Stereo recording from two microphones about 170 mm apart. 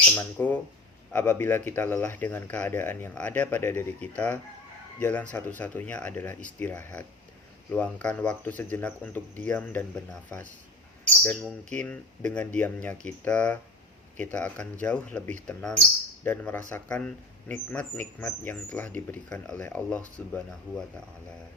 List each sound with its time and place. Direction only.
0.1 s speech: 10° left (ahead or behind)